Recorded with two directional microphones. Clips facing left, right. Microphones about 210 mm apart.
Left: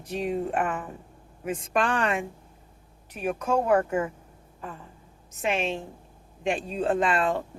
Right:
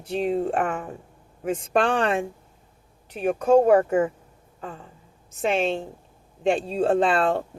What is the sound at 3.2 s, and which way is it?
Speech, 30° right (ahead or behind).